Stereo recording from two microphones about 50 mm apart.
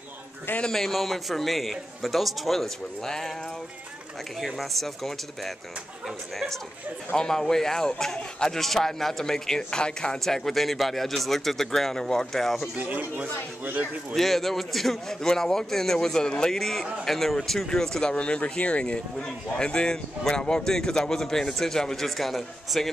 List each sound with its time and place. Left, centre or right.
0.7 s a man's voice: centre
4.6 s a man's voice: centre
7.2 s speech: centre
10.1 s a man's voice: centre
12.7 s speech: right
14.1 s speech: centre
18.1 s speech: left; by 22.8 s centre